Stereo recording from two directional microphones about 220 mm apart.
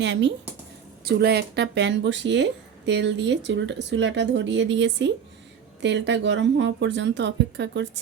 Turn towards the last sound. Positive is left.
turn(degrees=-55)  # may be behind; listen again after turning